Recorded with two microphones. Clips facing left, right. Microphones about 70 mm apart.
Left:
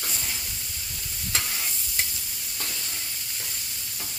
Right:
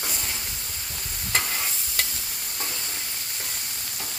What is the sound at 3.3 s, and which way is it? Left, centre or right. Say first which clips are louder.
Stir: right 3 dB; right.